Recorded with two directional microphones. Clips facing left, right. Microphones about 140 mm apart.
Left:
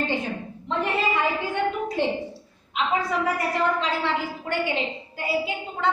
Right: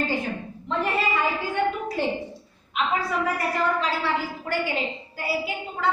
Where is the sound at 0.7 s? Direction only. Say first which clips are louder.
Even; 20° left (ahead or behind).